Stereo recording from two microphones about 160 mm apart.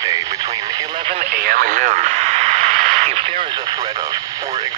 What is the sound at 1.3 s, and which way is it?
Radio, 65° right (ahead or behind).